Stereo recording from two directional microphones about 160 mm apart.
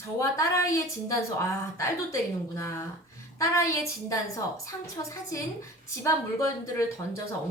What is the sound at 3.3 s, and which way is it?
A woman's voice, 20° left (ahead or behind).